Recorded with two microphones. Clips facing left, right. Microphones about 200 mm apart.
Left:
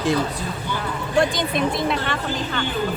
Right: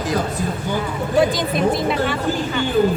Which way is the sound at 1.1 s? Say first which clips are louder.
Right 3 dB; centre (ahead or behind).